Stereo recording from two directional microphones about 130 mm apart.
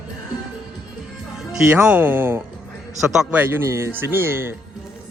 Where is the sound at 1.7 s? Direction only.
10° right (ahead or behind).